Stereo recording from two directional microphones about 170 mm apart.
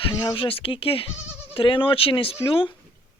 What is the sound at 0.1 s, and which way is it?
Speech, 30° left (ahead or behind).